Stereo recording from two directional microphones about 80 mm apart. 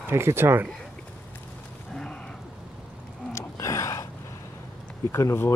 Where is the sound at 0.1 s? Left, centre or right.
Right.